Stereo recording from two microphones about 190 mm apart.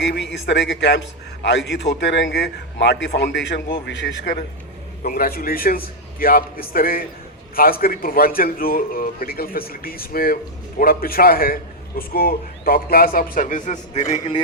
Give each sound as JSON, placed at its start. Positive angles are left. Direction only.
{"t": 0.0, "sound": "a man's voice", "side_deg": 65}
{"t": 5.0, "sound": "a man's voice", "side_deg": 50}